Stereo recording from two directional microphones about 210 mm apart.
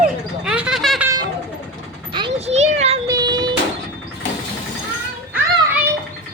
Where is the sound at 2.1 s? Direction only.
20° right (ahead or behind).